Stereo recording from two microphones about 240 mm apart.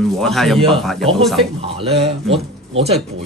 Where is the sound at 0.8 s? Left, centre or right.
Centre.